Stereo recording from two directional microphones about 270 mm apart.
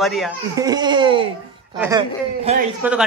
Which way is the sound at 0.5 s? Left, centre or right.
Centre.